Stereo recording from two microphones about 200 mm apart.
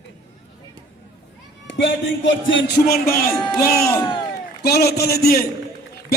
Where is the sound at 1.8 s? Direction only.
70° left (ahead or behind).